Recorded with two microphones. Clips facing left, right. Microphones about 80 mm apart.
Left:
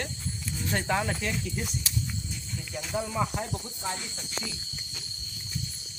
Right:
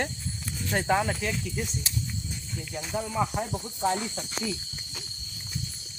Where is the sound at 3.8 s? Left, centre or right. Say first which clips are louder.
Right 11 dB; right.